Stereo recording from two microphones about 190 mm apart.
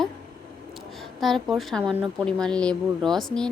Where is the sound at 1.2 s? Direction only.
Centre (ahead or behind).